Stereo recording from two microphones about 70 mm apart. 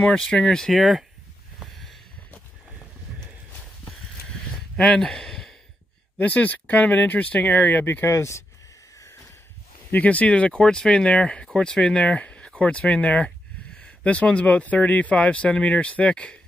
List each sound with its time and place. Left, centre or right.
0.0 s speech: centre
1.6 s a sound: centre
4.7 s speech: centre
6.1 s speech: left
7.8 s speech: left
8.1 s speech: left
9.8 s speech: left